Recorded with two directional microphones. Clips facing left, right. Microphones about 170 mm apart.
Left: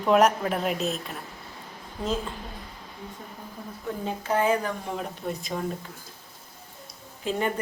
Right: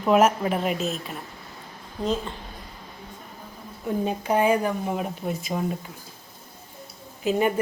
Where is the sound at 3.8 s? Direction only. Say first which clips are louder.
Right 6 dB; 15° right (ahead or behind).